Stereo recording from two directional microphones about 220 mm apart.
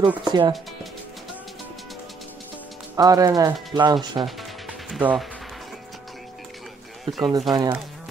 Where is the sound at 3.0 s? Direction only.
15° right (ahead or behind).